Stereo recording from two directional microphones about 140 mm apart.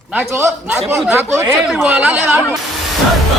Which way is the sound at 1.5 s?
Centre (ahead or behind).